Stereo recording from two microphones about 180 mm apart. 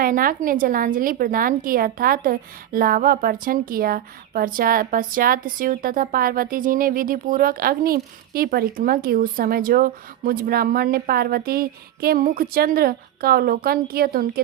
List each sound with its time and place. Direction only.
0.0 s a woman's voice: 50° right (ahead or behind)